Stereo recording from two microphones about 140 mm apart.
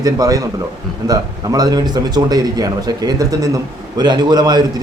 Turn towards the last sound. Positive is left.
turn(degrees=-30)  # may be behind; listen again after turning